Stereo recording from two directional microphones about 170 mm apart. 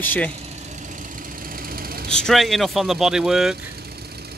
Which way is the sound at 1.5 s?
60° right (ahead or behind).